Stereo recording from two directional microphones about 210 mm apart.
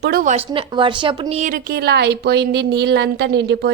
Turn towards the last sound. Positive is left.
turn(degrees=-55)  # may be behind; listen again after turning